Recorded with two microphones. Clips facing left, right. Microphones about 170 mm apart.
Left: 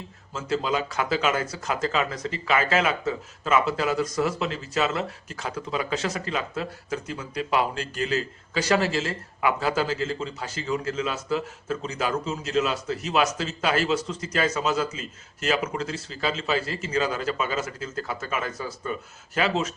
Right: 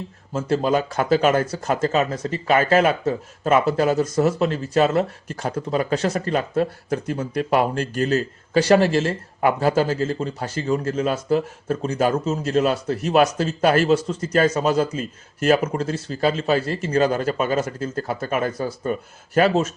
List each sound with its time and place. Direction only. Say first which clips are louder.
0.3 s speech: right 6 dB; 55° right (ahead or behind)
18.5 s speech: right 7 dB; 35° right (ahead or behind)
19.3 s speech: right 7 dB; 50° right (ahead or behind)